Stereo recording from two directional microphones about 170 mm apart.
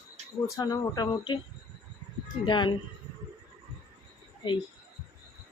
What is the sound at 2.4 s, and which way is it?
Speech, 25° left (ahead or behind).